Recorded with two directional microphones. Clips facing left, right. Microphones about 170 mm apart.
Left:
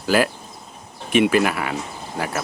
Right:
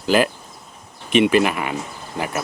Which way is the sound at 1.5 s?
5° left (ahead or behind).